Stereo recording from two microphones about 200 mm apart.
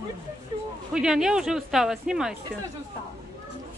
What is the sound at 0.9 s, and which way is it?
Speech, 5° right (ahead or behind).